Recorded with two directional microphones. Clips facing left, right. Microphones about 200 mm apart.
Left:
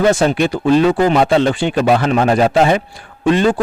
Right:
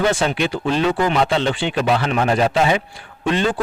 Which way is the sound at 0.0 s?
45° left (ahead or behind).